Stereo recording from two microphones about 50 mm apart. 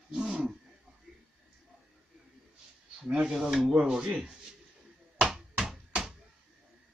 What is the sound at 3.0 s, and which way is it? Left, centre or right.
Speech, centre.